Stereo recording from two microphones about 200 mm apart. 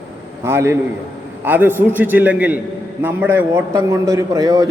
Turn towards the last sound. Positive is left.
turn(degrees=-20)  # may be behind; listen again after turning